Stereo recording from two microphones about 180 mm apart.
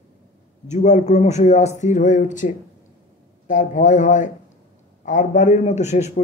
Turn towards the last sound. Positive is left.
turn(degrees=40)  # may be behind; listen again after turning